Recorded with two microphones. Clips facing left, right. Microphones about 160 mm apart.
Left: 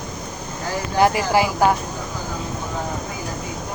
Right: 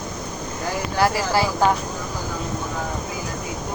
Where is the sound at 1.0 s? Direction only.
20° left (ahead or behind).